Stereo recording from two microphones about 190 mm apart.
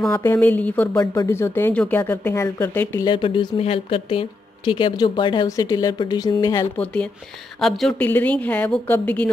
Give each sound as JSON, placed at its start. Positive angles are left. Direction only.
{"t": 0.1, "sound": "speech", "side_deg": 10}
{"t": 3.1, "sound": "speech", "side_deg": 25}
{"t": 6.8, "sound": "speech", "side_deg": 5}